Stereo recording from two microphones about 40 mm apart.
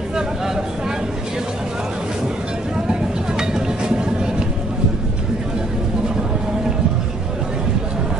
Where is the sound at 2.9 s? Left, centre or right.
Right.